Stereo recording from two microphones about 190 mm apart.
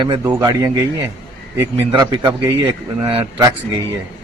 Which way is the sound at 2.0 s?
25° right (ahead or behind).